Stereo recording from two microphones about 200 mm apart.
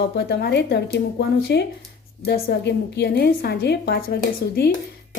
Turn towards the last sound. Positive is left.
turn(degrees=50)  # may be behind; listen again after turning